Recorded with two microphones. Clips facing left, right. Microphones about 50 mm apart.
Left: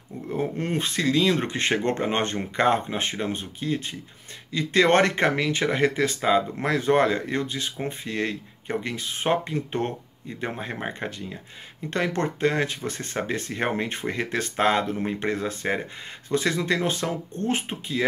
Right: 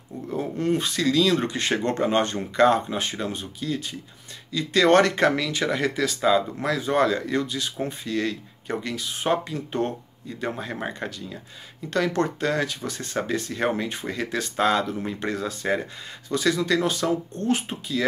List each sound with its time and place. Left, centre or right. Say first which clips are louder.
0.3 s speech: right 2 dB; left